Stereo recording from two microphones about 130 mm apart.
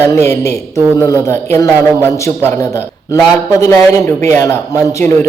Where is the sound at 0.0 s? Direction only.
20° left (ahead or behind).